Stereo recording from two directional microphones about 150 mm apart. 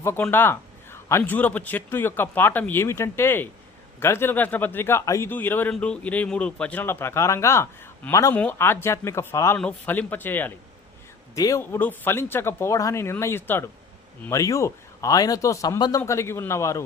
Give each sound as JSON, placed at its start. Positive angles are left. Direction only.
{"t": 0.0, "sound": "a man's voice", "side_deg": 15}